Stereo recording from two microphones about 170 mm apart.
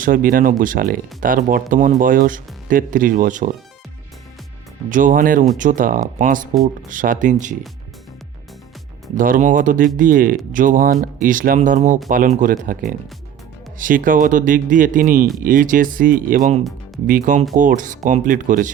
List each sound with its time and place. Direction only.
0.0 s speech: 55° right (ahead or behind)
4.9 s speech: 50° right (ahead or behind)
9.1 s speech: 55° right (ahead or behind)
13.7 s speech: 55° right (ahead or behind)